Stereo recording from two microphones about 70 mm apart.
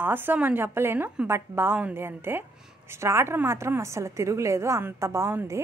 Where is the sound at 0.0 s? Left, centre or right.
Right.